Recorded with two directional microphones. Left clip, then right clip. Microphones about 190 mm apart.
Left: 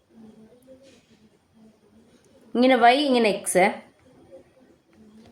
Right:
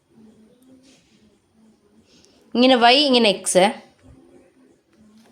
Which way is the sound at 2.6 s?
35° right (ahead or behind).